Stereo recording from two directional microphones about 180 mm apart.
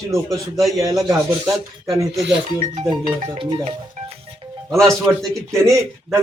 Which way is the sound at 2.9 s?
25° right (ahead or behind).